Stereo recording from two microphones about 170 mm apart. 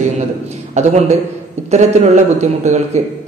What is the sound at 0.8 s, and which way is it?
Speech, 40° right (ahead or behind).